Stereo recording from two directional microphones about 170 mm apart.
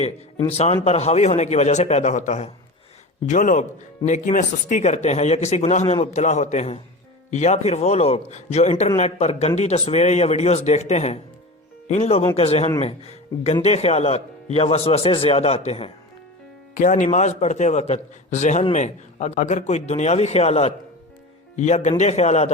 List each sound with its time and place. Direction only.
0.5 s a man's voice: 35° left (ahead or behind)
16.7 s a man's voice: 50° left (ahead or behind)